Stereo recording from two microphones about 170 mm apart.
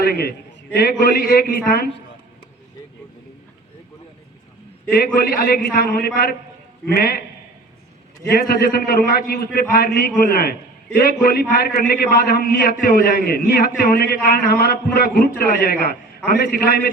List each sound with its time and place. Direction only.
0.0 s a man's voice: 65° left (ahead or behind)
4.9 s a man's voice: 60° left (ahead or behind)
8.3 s a man's voice: 65° left (ahead or behind)